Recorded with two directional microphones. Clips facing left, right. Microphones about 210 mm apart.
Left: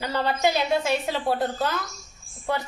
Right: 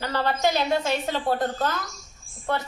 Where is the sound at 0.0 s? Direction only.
10° left (ahead or behind).